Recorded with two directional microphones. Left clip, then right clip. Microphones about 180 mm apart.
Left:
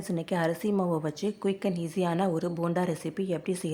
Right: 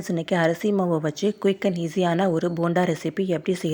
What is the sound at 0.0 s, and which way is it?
A woman's voice, 20° right (ahead or behind).